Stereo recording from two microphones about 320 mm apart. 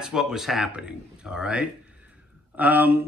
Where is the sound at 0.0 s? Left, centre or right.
Centre.